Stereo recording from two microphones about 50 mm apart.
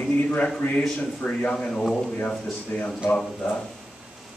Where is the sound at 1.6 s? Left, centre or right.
Centre.